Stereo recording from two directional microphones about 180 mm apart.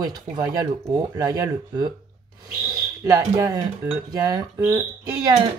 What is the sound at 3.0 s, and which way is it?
Speech, 20° right (ahead or behind).